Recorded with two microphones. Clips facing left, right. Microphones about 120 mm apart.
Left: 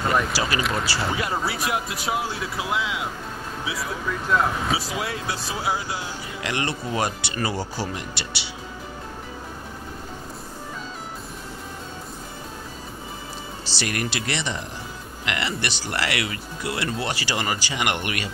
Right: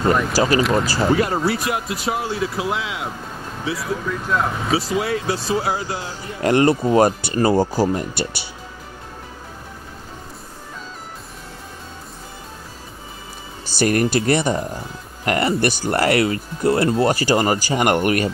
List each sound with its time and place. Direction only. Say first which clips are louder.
0.3 s speech: right 8 dB; 35° right (ahead or behind)
0.7 s speech: right 8 dB; 50° right (ahead or behind)
1.3 s speech: right 4 dB; centre (ahead or behind)
6.4 s speech: right 13 dB; 45° right (ahead or behind)
13.7 s speech: right 11 dB; 45° right (ahead or behind)